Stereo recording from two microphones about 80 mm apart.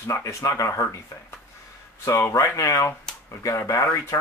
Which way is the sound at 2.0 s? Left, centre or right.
Left.